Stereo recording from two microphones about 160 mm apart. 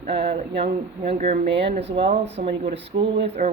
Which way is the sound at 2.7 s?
90° right.